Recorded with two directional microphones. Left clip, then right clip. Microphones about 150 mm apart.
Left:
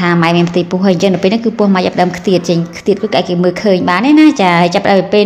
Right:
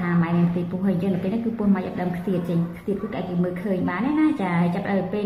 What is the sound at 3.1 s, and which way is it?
A woman's voice, 55° left (ahead or behind).